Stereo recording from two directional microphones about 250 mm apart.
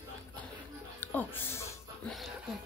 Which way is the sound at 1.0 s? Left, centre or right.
Centre.